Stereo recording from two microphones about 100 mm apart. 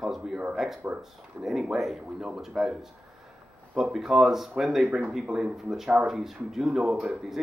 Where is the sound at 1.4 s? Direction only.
5° right (ahead or behind).